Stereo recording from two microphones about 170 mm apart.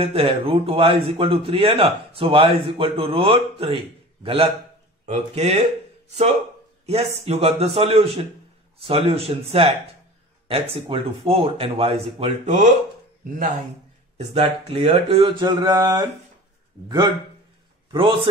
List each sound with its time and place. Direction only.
0.0 s a man's voice: 35° right (ahead or behind)
6.9 s a man's voice: 35° right (ahead or behind)
14.1 s a man's voice: 35° right (ahead or behind)
17.9 s a man's voice: 30° right (ahead or behind)